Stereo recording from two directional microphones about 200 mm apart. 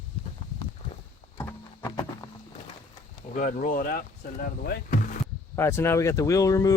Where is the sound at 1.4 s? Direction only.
10° left (ahead or behind).